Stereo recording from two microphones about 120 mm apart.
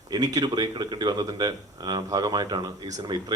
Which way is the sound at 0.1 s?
35° right (ahead or behind).